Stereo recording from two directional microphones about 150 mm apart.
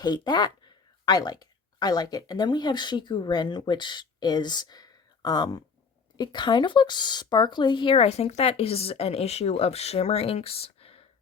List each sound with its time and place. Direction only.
0.0 s speech: 30° left (ahead or behind)